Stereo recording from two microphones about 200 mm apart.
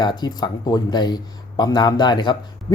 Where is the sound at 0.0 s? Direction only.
20° left (ahead or behind).